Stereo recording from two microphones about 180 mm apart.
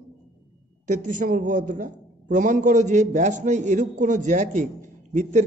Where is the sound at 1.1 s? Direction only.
45° right (ahead or behind).